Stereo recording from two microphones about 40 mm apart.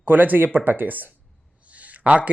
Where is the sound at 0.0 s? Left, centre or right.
Right.